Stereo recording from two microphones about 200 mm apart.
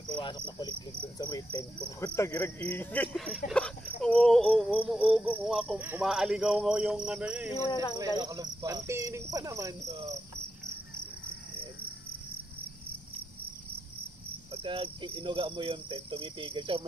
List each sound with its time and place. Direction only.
0.2 s cricket: 20° left (ahead or behind)
1.8 s speech: 10° left (ahead or behind)
3.4 s insect: 5° left (ahead or behind)
7.5 s cricket: 20° left (ahead or behind)
8.2 s cricket: 15° right (ahead or behind)
14.5 s cricket: 25° right (ahead or behind)